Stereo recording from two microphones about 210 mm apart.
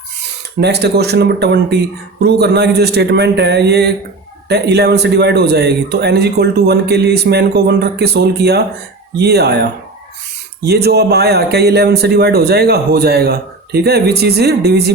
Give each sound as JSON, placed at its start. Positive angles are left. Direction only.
{"t": 0.6, "sound": "a man's voice", "side_deg": -50}
{"t": 10.7, "sound": "a man's voice", "side_deg": -50}